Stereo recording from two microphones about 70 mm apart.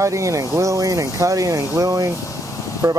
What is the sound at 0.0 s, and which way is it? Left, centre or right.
Speech, right.